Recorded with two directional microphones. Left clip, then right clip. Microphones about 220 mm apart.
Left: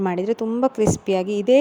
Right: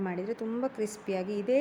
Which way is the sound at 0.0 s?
35° left (ahead or behind).